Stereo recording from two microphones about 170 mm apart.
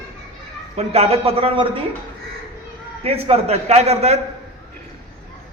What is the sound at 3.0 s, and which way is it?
A man's voice, 35° right (ahead or behind).